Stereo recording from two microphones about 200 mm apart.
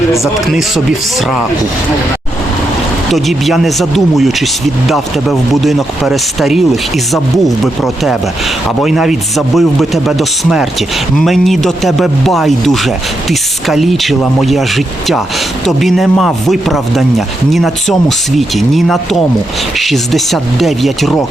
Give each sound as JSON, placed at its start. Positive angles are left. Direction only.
{"t": 0.5, "sound": "a man's voice", "side_deg": 0}
{"t": 3.1, "sound": "a man's voice", "side_deg": 0}